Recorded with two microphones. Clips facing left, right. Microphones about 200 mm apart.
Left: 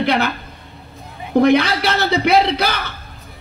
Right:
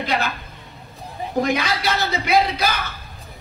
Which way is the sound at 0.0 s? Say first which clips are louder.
Left 6 dB; 65° left (ahead or behind).